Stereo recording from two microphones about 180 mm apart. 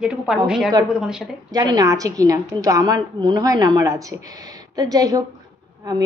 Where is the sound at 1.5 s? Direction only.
20° right (ahead or behind).